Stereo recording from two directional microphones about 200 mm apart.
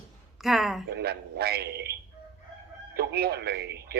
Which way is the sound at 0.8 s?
55° right (ahead or behind).